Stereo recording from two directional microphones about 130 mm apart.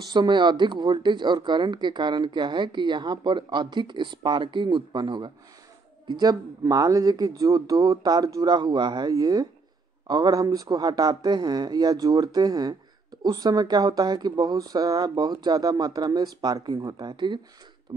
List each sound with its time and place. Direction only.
0.0 s speech: 35° right (ahead or behind)